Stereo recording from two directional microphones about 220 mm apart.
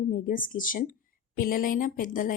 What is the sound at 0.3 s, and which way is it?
A woman's voice, 40° left (ahead or behind).